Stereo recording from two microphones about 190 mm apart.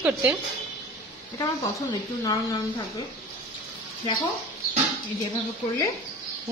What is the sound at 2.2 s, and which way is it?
Speech, 20° left (ahead or behind).